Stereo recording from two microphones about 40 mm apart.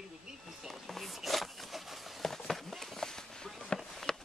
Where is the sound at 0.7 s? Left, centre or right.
Centre.